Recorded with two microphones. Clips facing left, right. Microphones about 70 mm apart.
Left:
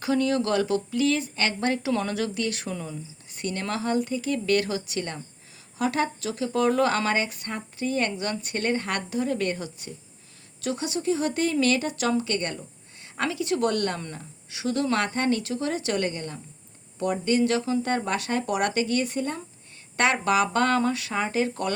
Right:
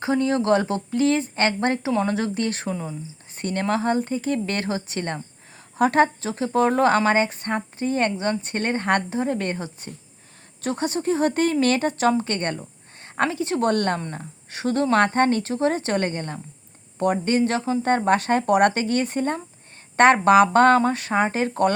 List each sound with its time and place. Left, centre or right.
0.0 s speech: right